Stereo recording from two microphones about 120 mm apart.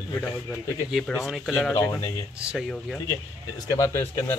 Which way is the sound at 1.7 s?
25° left (ahead or behind).